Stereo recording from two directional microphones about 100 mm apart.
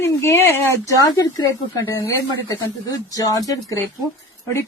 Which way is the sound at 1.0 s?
40° left (ahead or behind).